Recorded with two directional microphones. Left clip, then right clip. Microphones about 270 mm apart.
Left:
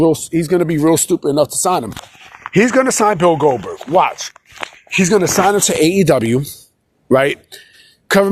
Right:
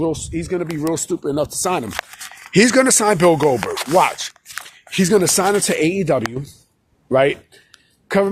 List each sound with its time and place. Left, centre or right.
0.0 s speech: left; by 4.0 s centre
4.0 s speech: centre
5.5 s speech: centre
5.9 s a woman's voice: left